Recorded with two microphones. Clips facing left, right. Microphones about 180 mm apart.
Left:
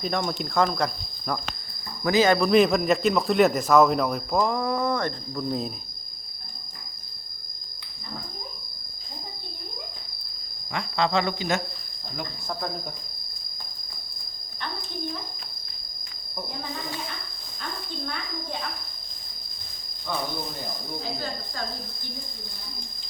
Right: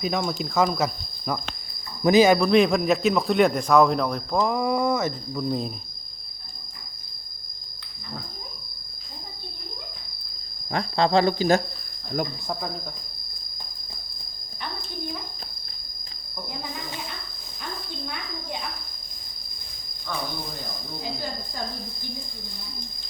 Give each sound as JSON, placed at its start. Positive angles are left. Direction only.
{"t": 0.0, "sound": "speech", "side_deg": 0}
{"t": 4.5, "sound": "speech", "side_deg": -10}
{"t": 10.7, "sound": "speech", "side_deg": -35}
{"t": 17.6, "sound": "a sound", "side_deg": -10}
{"t": 21.0, "sound": "speech", "side_deg": -15}